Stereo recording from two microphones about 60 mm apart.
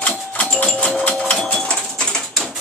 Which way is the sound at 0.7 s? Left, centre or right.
Centre.